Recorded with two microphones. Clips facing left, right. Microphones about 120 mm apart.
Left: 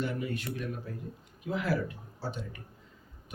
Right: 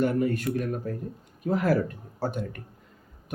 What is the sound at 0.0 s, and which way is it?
Speech, 50° right (ahead or behind).